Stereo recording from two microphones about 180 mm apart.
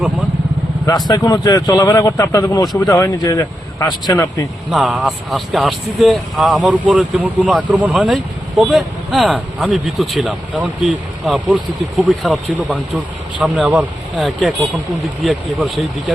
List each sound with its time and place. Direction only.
1.0 s a man's voice: 20° left (ahead or behind)
4.7 s speech: centre (ahead or behind)